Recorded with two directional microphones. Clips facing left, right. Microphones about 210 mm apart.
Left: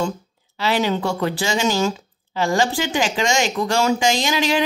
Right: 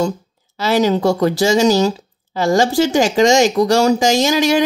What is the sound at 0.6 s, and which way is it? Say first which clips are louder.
Speech: right 5 dB; 40° right (ahead or behind).